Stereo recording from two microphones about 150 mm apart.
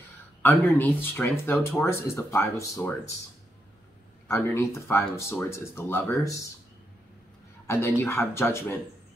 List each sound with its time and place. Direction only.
0.4 s speech: 10° left (ahead or behind)
4.3 s speech: 20° left (ahead or behind)
7.6 s speech: 15° left (ahead or behind)